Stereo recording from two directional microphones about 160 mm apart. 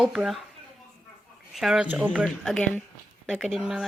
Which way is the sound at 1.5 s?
Centre (ahead or behind).